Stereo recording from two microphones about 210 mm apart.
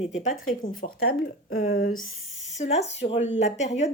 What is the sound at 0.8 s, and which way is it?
Speech, 45° left (ahead or behind).